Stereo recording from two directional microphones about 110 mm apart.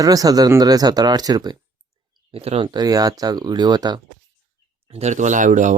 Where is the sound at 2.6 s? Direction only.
35° right (ahead or behind).